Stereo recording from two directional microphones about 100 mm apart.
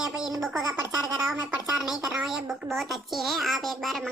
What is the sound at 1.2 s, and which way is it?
A child's voice, 5° right (ahead or behind).